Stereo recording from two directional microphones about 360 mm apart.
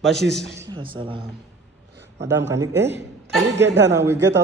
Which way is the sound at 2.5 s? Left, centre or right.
Centre.